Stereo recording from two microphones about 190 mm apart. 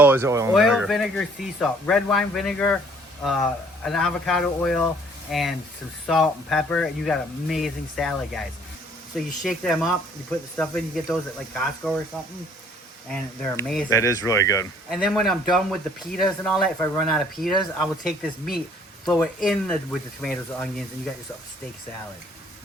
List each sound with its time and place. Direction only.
0.0 s speech: 10° right (ahead or behind)
0.5 s speech: centre (ahead or behind)
13.4 s speech: 5° left (ahead or behind)
13.9 s speech: 15° left (ahead or behind)
14.8 s speech: centre (ahead or behind)